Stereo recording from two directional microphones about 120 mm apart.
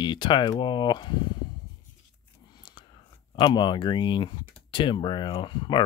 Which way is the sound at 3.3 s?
40° left (ahead or behind).